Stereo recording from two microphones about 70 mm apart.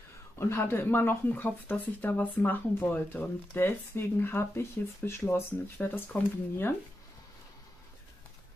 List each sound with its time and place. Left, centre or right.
0.4 s speech: left